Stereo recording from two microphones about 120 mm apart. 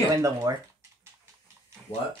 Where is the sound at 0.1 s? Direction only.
30° right (ahead or behind).